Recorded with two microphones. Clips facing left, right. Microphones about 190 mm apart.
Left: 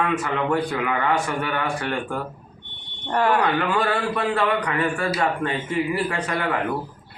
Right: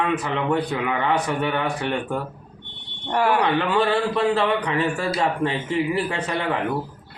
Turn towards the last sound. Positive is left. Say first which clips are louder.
# even
turn(degrees=-20)  # may be behind; listen again after turning